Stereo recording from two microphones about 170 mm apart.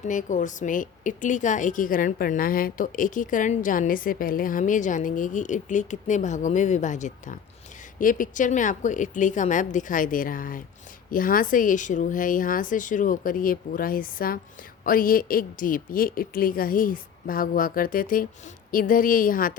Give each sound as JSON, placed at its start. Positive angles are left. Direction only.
{"t": 0.0, "sound": "a woman's voice", "side_deg": 50}